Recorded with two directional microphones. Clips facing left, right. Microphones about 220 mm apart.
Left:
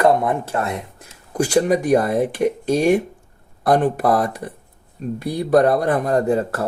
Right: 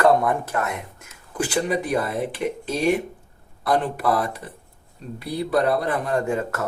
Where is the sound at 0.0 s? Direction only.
20° left (ahead or behind).